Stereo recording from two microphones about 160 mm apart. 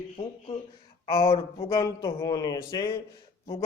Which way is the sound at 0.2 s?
30° left (ahead or behind).